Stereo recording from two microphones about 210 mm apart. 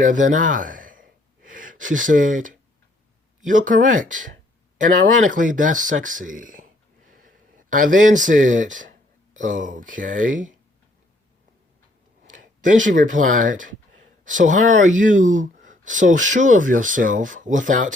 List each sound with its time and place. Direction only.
0.0 s speech: 40° right (ahead or behind)
12.3 s speech: 40° right (ahead or behind)